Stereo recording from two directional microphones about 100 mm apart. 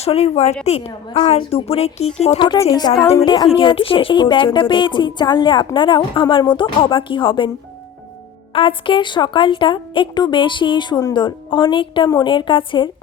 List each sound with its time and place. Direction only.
0.0 s speech: 90° left
2.6 s a woman's voice: 40° left (ahead or behind); by 7.5 s 55° left (ahead or behind)
8.5 s a woman's voice: 60° left (ahead or behind)